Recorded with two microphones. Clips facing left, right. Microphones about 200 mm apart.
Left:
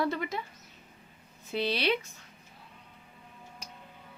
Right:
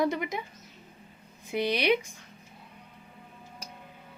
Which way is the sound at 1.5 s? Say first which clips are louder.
Right 3 dB; 15° right (ahead or behind).